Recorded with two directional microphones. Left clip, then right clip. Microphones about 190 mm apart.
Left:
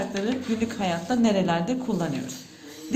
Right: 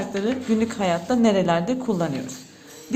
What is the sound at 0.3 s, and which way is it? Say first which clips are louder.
A woman's voice: right 4 dB; 30° right (ahead or behind).